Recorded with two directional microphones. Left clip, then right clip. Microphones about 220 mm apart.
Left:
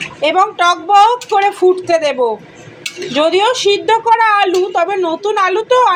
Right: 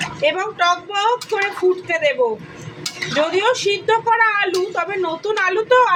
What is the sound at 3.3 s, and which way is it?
Speech, 20° left (ahead or behind).